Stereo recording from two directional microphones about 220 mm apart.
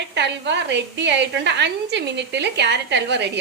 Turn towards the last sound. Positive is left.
turn(degrees=-50)  # may be behind; listen again after turning